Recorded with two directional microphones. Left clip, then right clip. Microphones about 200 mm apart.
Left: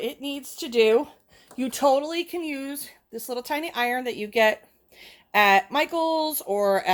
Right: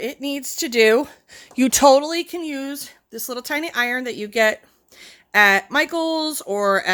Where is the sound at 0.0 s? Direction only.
45° right (ahead or behind).